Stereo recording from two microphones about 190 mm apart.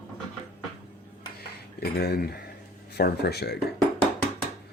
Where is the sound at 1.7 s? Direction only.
55° left (ahead or behind).